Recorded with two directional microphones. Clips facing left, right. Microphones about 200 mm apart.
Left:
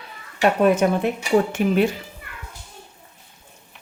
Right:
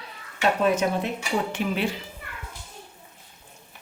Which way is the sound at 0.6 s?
55° left (ahead or behind).